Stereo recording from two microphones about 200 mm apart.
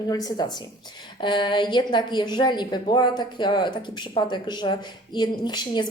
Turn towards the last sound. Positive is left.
turn(degrees=20)  # may be behind; listen again after turning